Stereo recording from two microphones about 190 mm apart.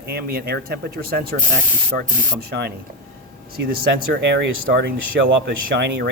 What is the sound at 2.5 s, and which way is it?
Speech, 60° right (ahead or behind).